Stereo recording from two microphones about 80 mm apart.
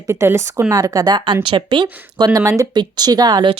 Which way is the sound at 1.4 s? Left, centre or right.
Right.